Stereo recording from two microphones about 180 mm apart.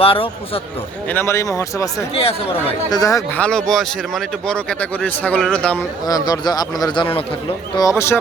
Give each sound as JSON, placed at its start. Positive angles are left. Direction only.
{"t": 0.0, "sound": "a man's voice", "side_deg": 30}
{"t": 1.0, "sound": "speech", "side_deg": 15}
{"t": 2.1, "sound": "a man's voice", "side_deg": 35}
{"t": 2.9, "sound": "a man's voice", "side_deg": 20}
{"t": 3.7, "sound": "speech", "side_deg": 0}
{"t": 6.1, "sound": "a man's voice", "side_deg": 20}
{"t": 7.8, "sound": "speech", "side_deg": 15}